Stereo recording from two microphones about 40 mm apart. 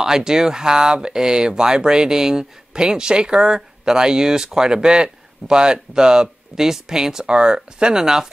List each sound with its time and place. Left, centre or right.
0.0 s speech: centre